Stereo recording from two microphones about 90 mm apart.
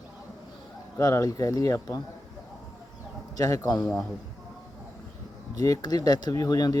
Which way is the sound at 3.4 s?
40° left (ahead or behind).